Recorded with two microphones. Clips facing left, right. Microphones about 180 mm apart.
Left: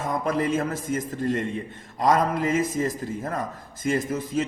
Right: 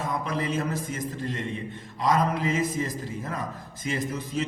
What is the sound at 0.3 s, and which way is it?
A man's voice, 50° left (ahead or behind).